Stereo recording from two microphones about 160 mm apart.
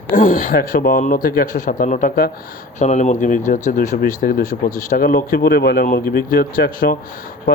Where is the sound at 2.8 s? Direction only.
45° left (ahead or behind).